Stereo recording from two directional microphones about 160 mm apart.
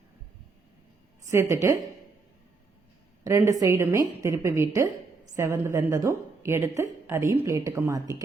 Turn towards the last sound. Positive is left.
turn(degrees=-20)  # may be behind; listen again after turning